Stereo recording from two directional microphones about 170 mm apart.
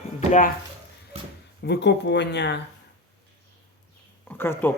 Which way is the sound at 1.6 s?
85° left.